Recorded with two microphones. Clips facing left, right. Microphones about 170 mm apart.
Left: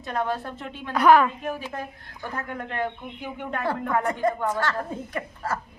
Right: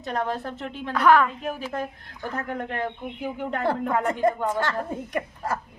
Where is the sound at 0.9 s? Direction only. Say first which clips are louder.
Left 2 dB; 15° left (ahead or behind).